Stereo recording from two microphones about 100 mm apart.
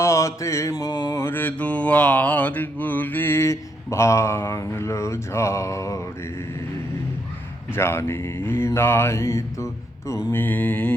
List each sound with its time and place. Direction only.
0.0 s mantra: 30° left (ahead or behind)
7.7 s mantra: 25° left (ahead or behind)